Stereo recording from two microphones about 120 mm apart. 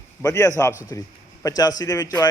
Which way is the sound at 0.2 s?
25° left (ahead or behind).